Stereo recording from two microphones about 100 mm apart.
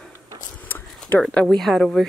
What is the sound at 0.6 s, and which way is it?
Horse, 20° left (ahead or behind).